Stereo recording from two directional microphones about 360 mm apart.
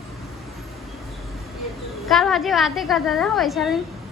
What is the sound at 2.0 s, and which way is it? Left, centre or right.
A woman's voice, centre.